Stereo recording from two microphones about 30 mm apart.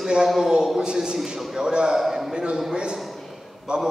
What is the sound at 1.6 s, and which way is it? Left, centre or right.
Speech, right.